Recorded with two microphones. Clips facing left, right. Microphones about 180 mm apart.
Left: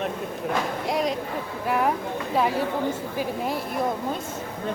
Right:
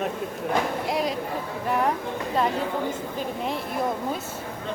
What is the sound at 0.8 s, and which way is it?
A woman's voice, centre (ahead or behind).